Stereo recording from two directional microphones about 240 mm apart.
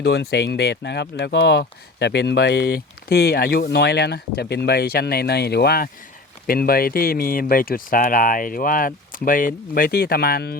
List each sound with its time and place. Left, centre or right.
0.0 s speech: left